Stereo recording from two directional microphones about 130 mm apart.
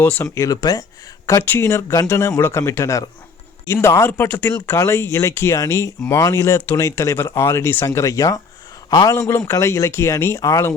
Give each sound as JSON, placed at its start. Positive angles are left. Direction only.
{"t": 0.0, "sound": "speech", "side_deg": 15}
{"t": 0.3, "sound": "speech", "side_deg": 25}